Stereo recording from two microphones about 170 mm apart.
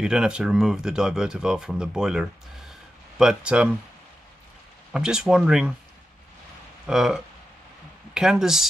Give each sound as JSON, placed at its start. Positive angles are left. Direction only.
{"t": 0.0, "sound": "speech", "side_deg": -5}
{"t": 4.9, "sound": "speech", "side_deg": -5}
{"t": 6.9, "sound": "speech", "side_deg": -5}